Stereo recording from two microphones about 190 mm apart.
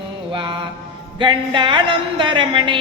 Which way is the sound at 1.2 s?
25° right (ahead or behind).